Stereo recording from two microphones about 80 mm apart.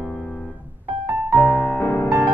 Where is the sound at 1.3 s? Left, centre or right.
Centre.